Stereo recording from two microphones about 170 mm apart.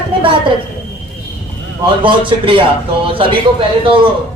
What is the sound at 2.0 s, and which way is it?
A man's voice, 30° right (ahead or behind).